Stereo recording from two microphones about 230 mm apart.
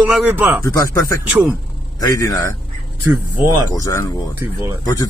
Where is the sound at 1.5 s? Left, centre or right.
Centre.